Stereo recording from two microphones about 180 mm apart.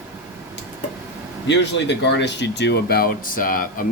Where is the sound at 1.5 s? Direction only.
75° left (ahead or behind).